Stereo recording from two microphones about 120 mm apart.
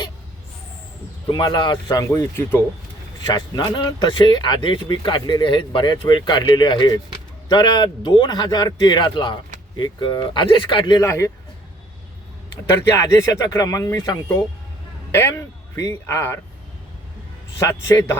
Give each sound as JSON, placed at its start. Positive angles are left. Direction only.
{"t": 1.3, "sound": "speech", "side_deg": 40}
{"t": 2.0, "sound": "speech", "side_deg": 20}
{"t": 3.2, "sound": "speech", "side_deg": 35}
{"t": 13.0, "sound": "speech", "side_deg": 25}
{"t": 17.6, "sound": "speech", "side_deg": 25}